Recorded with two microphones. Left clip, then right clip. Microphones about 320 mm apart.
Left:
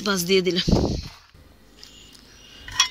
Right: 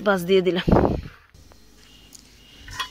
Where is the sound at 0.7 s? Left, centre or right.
Right.